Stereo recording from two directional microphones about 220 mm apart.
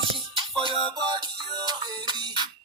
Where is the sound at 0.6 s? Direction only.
25° right (ahead or behind).